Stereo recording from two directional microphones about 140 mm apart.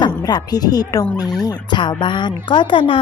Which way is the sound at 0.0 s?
30° left (ahead or behind).